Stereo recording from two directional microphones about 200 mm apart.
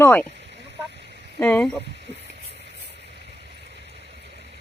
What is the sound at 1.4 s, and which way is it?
Speech, 5° left (ahead or behind).